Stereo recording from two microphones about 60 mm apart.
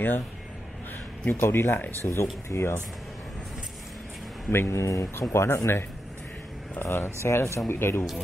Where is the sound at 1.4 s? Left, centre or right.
Left.